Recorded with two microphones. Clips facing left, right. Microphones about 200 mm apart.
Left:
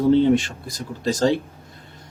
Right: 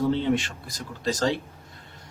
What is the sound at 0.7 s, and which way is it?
Speech, 35° left (ahead or behind).